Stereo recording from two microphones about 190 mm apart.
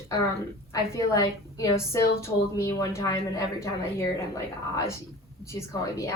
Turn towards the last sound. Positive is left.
turn(degrees=15)  # may be behind; listen again after turning